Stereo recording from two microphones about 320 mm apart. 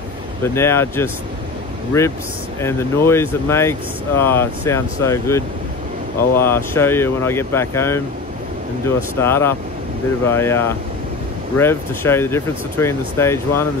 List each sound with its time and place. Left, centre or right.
0.4 s speech: centre
9.2 s speech: centre